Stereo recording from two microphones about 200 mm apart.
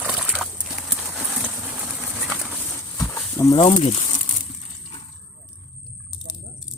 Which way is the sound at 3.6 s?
35° left (ahead or behind).